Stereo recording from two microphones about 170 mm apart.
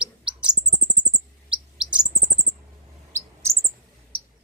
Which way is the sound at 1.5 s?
5° right (ahead or behind).